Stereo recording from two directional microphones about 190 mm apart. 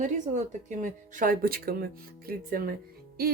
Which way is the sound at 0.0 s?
40° right (ahead or behind).